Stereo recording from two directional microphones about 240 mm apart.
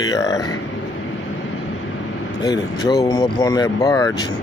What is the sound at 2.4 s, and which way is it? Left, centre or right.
Speech, centre.